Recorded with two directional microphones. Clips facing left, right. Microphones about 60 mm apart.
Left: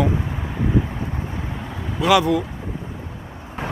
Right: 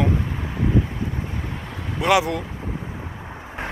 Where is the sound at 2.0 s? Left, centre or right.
Centre.